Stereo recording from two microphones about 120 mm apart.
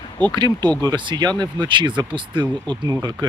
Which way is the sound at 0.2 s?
40° right (ahead or behind).